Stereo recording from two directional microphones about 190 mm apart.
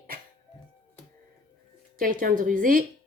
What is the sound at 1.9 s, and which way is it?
Speech, 45° right (ahead or behind).